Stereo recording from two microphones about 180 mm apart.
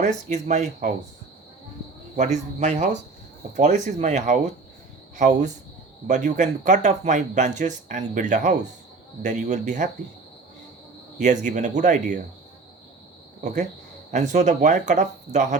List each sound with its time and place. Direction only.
0.0 s speech: 45° right (ahead or behind)
2.1 s speech: 40° right (ahead or behind)
11.2 s speech: 40° right (ahead or behind)
13.4 s speech: 45° right (ahead or behind)